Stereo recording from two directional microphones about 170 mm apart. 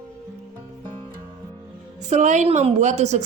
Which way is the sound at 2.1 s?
45° right (ahead or behind).